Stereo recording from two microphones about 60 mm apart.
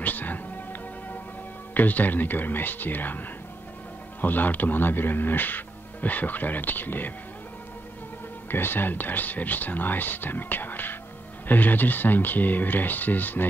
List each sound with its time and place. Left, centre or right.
0.0 s music: left
1.7 s speech: left
4.2 s speech: left
8.5 s speech: left